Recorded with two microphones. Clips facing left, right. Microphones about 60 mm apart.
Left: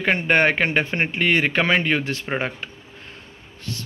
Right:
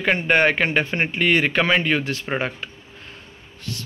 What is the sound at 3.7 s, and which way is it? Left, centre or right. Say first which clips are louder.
Speech: even; left.